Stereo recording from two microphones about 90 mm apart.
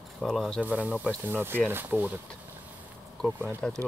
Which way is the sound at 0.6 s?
15° right (ahead or behind).